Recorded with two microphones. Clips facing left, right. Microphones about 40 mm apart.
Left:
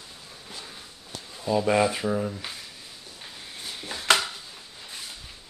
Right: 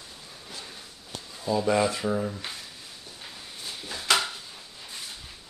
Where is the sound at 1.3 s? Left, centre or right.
Centre.